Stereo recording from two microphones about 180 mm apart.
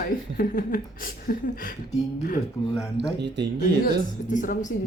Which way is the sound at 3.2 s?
75° right (ahead or behind).